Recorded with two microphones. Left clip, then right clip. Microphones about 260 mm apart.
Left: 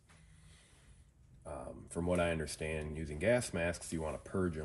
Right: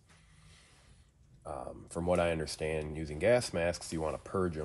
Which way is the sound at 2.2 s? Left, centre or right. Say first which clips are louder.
Right 4 dB; centre.